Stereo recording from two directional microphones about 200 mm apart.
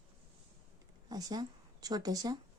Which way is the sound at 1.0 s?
20° right (ahead or behind).